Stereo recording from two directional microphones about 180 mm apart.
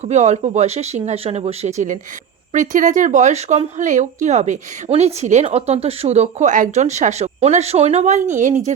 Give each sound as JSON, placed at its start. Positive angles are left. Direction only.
{"t": 0.0, "sound": "speech", "side_deg": -40}